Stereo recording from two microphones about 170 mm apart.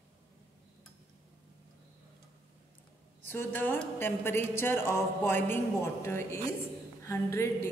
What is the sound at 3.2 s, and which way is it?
Speech, 10° left (ahead or behind).